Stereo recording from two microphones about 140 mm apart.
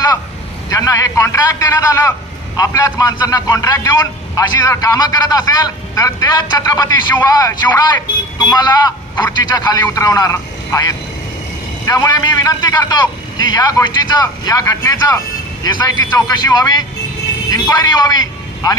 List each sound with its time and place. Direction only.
0.7 s a man's voice: 25° left (ahead or behind)